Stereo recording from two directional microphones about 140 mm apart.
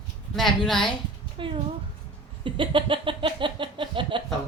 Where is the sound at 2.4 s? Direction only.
35° right (ahead or behind).